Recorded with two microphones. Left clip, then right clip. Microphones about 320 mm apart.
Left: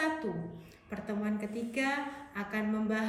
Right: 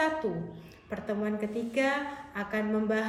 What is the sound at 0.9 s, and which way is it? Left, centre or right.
A woman's voice, centre.